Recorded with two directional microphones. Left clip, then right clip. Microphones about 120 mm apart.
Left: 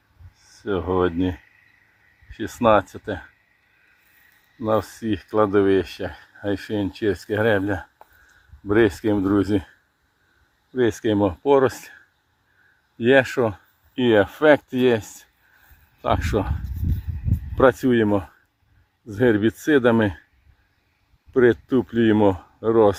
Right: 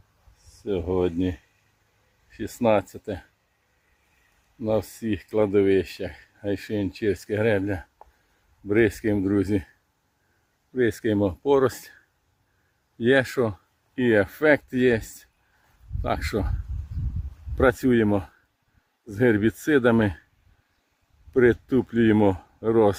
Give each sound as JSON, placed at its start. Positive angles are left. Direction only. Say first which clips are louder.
{"t": 0.6, "sound": "speech", "louder": "left 3 dB", "side_deg": -5}
{"t": 4.6, "sound": "speech", "louder": "left 3 dB", "side_deg": -15}
{"t": 10.8, "sound": "speech", "louder": "left 3 dB", "side_deg": -15}
{"t": 13.0, "sound": "speech", "louder": "left 4 dB", "side_deg": -15}
{"t": 21.4, "sound": "speech", "louder": "left 3 dB", "side_deg": -20}